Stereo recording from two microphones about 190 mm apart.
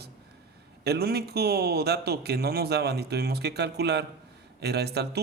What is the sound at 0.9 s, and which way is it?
A man's voice, 55° right (ahead or behind).